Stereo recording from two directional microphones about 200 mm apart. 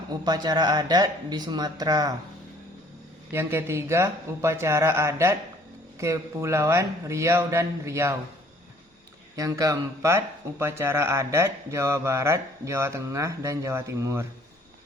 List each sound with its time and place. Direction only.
0.1 s speech: 20° right (ahead or behind)
3.3 s speech: 10° right (ahead or behind)
9.3 s speech: 15° right (ahead or behind)